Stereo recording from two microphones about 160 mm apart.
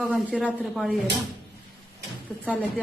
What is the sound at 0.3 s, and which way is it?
Speech, 5° left (ahead or behind).